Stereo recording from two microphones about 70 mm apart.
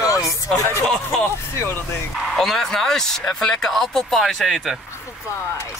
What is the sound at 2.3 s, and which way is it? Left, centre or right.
Speech, centre.